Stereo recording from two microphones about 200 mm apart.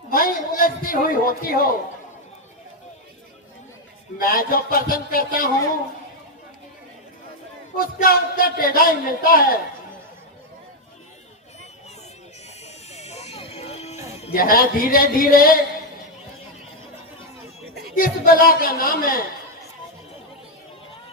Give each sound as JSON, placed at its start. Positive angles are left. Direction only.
{"t": 0.1, "sound": "a man's voice", "side_deg": 45}
{"t": 4.2, "sound": "a man's voice", "side_deg": 45}
{"t": 7.8, "sound": "a man's voice", "side_deg": 45}
{"t": 12.6, "sound": "a sound", "side_deg": 35}
{"t": 14.3, "sound": "a man's voice", "side_deg": 45}
{"t": 17.9, "sound": "a man's voice", "side_deg": 45}